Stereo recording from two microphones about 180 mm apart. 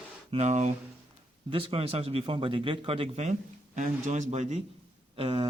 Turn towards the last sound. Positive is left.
turn(degrees=-30)  # may be behind; listen again after turning